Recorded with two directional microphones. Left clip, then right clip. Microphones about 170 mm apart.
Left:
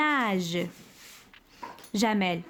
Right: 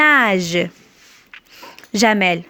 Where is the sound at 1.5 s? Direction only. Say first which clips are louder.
Right 9 dB; 25° right (ahead or behind).